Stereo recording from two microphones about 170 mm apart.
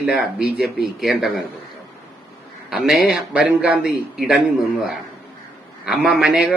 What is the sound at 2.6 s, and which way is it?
A man's voice, 5° right (ahead or behind).